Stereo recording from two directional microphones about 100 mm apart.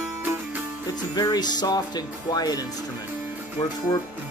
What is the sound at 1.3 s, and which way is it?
Speech, 45° left (ahead or behind).